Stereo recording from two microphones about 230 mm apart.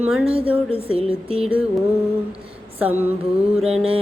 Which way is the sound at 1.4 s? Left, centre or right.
Centre.